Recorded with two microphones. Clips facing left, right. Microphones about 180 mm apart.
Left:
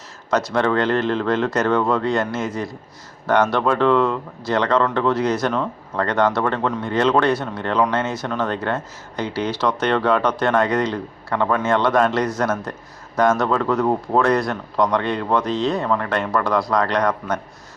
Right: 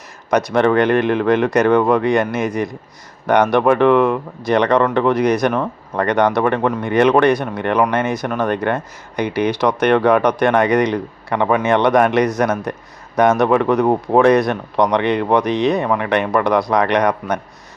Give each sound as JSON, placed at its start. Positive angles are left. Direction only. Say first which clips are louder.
{"t": 0.3, "sound": "speech", "louder": "right 4 dB", "side_deg": -15}